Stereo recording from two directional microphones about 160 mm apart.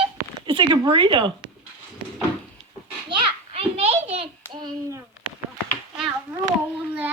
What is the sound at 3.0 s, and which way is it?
Children playing, 30° right (ahead or behind).